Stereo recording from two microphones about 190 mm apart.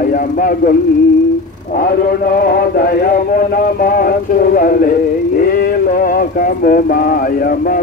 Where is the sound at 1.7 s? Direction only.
50° left (ahead or behind).